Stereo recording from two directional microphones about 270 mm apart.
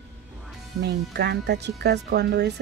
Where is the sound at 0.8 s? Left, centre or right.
Right.